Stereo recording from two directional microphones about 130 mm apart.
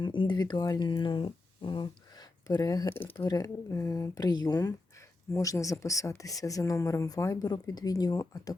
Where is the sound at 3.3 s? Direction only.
25° left (ahead or behind).